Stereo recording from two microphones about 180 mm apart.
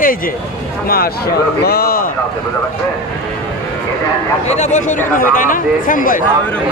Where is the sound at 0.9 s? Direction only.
55° left (ahead or behind).